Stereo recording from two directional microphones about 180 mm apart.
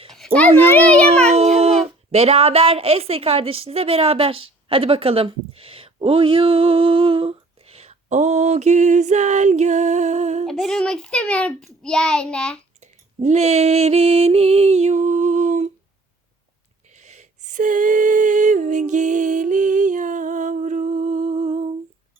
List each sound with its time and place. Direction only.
0.3 s a child's voice: 10° left (ahead or behind)
1.3 s child singing: 35° right (ahead or behind)
1.8 s a woman's voice: 35° right (ahead or behind)
10.4 s a child's voice: centre (ahead or behind)
12.8 s a woman's voice: 40° right (ahead or behind)
16.9 s a sound: 40° right (ahead or behind)